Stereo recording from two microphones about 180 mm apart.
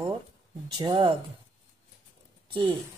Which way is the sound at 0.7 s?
25° right (ahead or behind).